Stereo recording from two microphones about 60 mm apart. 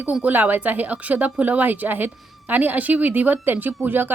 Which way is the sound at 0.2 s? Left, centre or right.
Right.